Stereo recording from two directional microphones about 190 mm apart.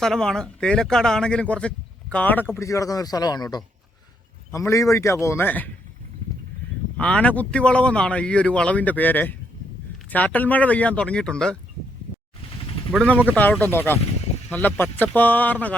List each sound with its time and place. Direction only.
0.0 s a man's voice: 5° left (ahead or behind)
6.9 s speech: 5° left (ahead or behind)
12.9 s a man's voice: centre (ahead or behind)